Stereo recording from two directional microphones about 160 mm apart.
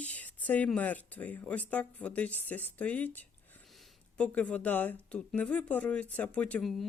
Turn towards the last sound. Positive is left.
turn(degrees=0)  # may be behind; listen again after turning